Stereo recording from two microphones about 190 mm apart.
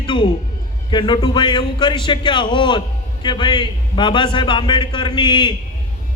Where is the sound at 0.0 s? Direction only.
25° left (ahead or behind).